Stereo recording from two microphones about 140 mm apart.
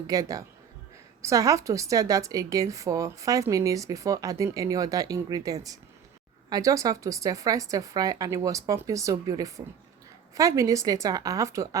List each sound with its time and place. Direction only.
0.1 s a woman's voice: 25° right (ahead or behind)